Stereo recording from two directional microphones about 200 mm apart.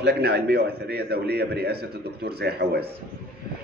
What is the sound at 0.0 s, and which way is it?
A man's voice, 55° right (ahead or behind).